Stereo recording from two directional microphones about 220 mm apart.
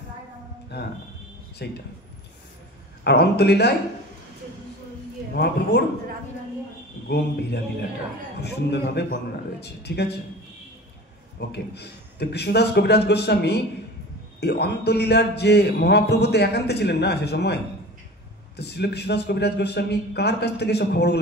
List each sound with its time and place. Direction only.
0.7 s music: 50° left (ahead or behind)
1.6 s a man's voice: 50° left (ahead or behind)
3.0 s a man's voice: 50° left (ahead or behind)
5.3 s a man's voice: 50° left (ahead or behind)
7.1 s a man's voice: 50° left (ahead or behind)
11.3 s a man's voice: 50° left (ahead or behind)
18.6 s a man's voice: 50° left (ahead or behind)